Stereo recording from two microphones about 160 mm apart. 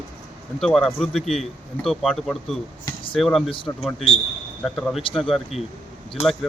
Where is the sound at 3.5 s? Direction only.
30° left (ahead or behind).